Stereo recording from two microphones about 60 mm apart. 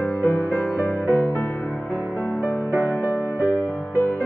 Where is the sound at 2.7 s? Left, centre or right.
Right.